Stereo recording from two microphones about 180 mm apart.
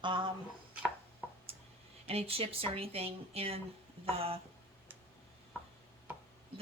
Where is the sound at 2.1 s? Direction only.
35° right (ahead or behind).